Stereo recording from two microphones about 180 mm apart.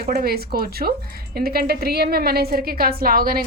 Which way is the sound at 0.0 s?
60° right (ahead or behind).